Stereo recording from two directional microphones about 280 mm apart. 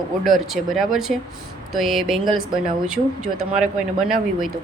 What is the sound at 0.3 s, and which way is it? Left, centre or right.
Speech, centre.